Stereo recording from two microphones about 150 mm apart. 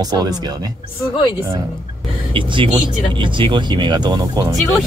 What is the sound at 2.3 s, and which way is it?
Speech, 35° right (ahead or behind).